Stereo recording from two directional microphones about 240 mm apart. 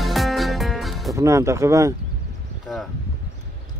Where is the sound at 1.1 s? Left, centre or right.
Centre.